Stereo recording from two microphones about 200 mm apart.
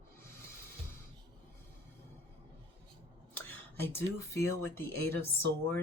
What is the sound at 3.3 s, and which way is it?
Speech, 10° left (ahead or behind).